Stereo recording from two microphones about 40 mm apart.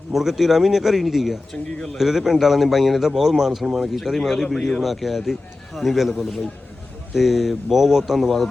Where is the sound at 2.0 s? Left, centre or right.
Centre.